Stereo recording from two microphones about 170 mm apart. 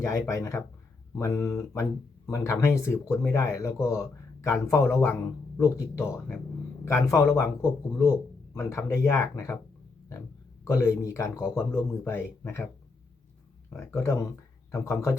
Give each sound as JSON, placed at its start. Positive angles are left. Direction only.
{"t": 0.0, "sound": "speech", "side_deg": 15}
{"t": 13.7, "sound": "speech", "side_deg": 15}